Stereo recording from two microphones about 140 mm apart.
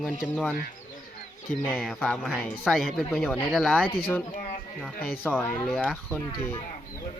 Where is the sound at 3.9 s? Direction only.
15° left (ahead or behind).